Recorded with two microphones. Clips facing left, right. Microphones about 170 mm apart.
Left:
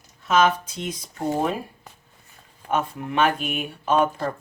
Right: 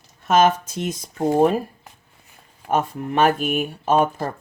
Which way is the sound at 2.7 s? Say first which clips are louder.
Right 3 dB; 45° right (ahead or behind).